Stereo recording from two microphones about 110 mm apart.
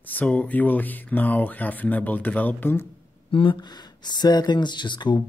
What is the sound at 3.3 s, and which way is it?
Speech, 50° left (ahead or behind).